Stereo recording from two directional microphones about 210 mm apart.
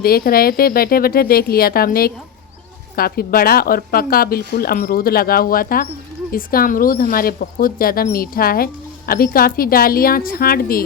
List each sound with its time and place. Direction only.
0.0 s speech: 45° left (ahead or behind)